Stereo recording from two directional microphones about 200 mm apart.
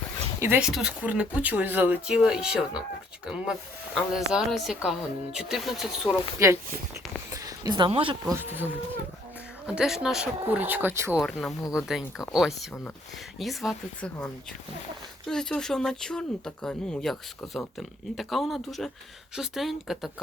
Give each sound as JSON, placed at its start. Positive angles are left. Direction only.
{"t": 0.3, "sound": "speech", "side_deg": -10}
{"t": 6.4, "sound": "a woman's voice", "side_deg": -15}
{"t": 8.2, "sound": "speech", "side_deg": -15}
{"t": 11.2, "sound": "speech", "side_deg": 0}
{"t": 15.3, "sound": "speech", "side_deg": 5}